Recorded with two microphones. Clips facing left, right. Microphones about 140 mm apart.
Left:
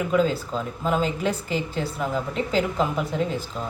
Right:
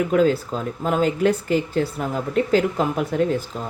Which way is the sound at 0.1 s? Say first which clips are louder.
Right 4 dB; 55° right (ahead or behind).